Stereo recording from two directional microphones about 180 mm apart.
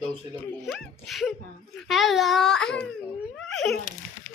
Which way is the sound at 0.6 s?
Centre (ahead or behind).